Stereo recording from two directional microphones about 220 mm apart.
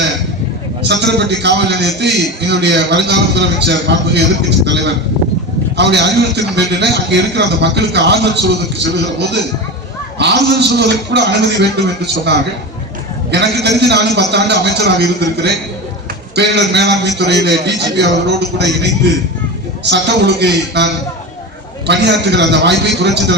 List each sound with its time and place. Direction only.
0.8 s a man's voice: 50° right (ahead or behind)
5.7 s a man's voice: 50° right (ahead or behind)
13.3 s a man's voice: 50° right (ahead or behind)